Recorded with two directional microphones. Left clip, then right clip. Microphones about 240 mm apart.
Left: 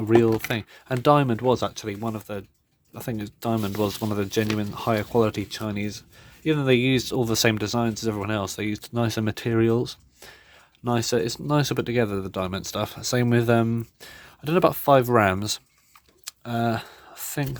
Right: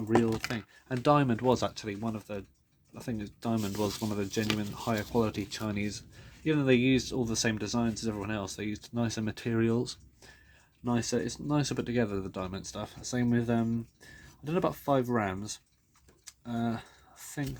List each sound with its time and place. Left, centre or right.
0.2 s speech: left
10.8 s speech: left
16.2 s a sound: left